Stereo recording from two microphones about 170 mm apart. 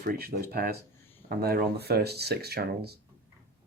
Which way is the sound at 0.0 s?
60° right (ahead or behind).